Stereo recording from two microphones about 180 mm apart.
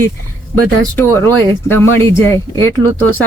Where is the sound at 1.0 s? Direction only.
10° left (ahead or behind).